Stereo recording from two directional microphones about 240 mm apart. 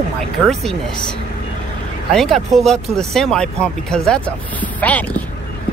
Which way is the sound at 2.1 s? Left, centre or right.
Centre.